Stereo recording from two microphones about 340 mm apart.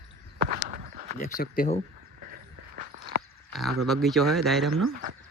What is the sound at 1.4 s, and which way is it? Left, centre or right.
Speech, left.